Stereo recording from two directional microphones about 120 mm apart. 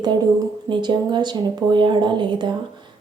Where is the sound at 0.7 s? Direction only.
40° right (ahead or behind).